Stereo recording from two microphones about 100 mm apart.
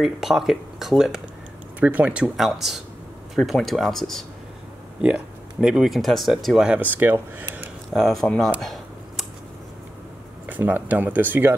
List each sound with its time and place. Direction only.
0.0 s speech: 5° right (ahead or behind)
1.8 s speech: 15° right (ahead or behind); by 4.3 s 5° left (ahead or behind)
5.0 s speech: 10° right (ahead or behind)
7.9 s speech: centre (ahead or behind)
8.5 s a sound: centre (ahead or behind)
10.5 s speech: 15° right (ahead or behind)